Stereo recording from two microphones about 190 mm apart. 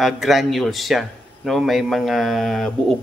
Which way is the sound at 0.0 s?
Centre (ahead or behind).